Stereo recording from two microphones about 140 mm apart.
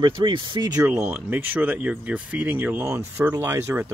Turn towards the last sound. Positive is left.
turn(degrees=-15)  # may be behind; listen again after turning